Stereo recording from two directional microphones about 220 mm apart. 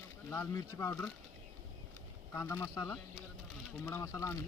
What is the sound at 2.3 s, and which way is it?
Speech, 10° left (ahead or behind).